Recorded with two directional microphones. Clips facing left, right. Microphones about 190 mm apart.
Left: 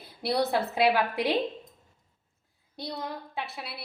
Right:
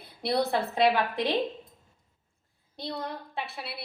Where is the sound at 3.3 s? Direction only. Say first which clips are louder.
Even; centre (ahead or behind).